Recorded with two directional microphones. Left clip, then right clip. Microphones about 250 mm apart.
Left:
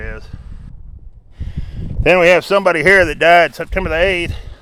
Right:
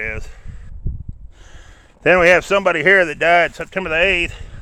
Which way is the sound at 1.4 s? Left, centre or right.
Centre.